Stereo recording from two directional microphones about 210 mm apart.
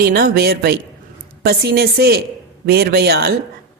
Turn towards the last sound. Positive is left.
turn(degrees=-50)  # may be behind; listen again after turning